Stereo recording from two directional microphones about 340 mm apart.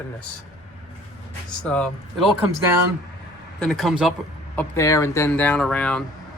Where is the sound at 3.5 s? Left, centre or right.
Centre.